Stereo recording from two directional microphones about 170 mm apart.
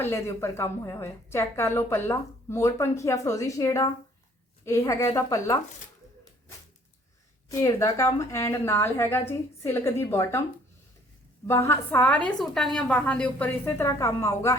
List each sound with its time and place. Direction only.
0.0 s a woman's voice: 15° left (ahead or behind)
7.5 s a woman's voice: 20° left (ahead or behind)
11.4 s a woman's voice: 15° left (ahead or behind)